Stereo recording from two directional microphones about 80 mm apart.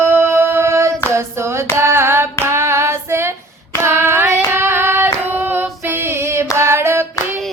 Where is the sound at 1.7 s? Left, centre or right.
Right.